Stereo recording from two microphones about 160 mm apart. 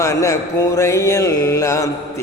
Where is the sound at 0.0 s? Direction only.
20° left (ahead or behind).